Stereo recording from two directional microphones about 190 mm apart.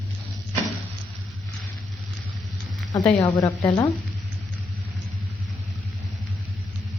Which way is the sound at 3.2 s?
15° left (ahead or behind).